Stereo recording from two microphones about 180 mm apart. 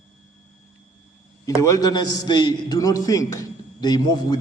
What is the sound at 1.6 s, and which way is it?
A man's voice, 15° left (ahead or behind).